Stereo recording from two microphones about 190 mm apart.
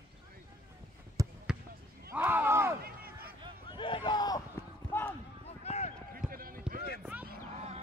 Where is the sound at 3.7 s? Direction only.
25° left (ahead or behind).